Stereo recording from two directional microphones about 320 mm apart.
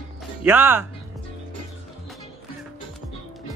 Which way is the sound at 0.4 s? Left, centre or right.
Centre.